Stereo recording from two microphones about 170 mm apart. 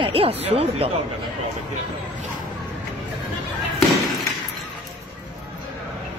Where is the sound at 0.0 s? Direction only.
35° right (ahead or behind).